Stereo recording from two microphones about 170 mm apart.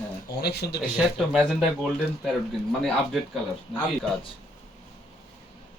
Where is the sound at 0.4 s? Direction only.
70° left (ahead or behind).